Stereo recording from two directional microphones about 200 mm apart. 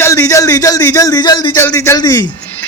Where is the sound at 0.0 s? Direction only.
15° left (ahead or behind).